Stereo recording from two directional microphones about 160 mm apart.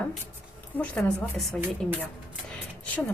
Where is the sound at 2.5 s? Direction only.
10° left (ahead or behind).